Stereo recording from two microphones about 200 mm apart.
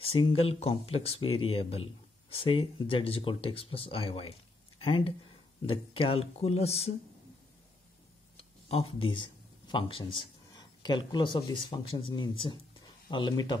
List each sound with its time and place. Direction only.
0.0 s speech: 30° left (ahead or behind)
8.4 s speech: 30° left (ahead or behind)